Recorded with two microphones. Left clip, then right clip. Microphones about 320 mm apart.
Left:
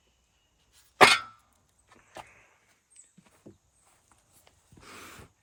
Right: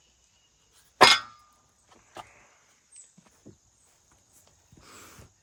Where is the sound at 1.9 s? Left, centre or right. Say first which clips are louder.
Right 1 dB; centre.